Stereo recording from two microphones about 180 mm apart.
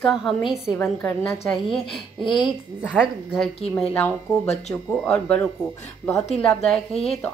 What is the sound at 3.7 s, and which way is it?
Speech, 10° left (ahead or behind).